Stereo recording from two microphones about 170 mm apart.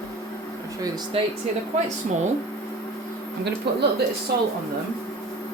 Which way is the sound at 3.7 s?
75° right (ahead or behind).